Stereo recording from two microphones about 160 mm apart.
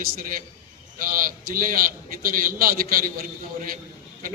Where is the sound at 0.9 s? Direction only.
60° right (ahead or behind).